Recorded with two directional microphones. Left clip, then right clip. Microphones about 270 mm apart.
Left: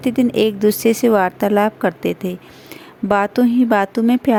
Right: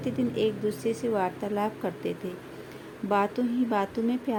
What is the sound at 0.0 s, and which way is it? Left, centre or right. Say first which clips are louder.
A woman's voice: left 11 dB; left.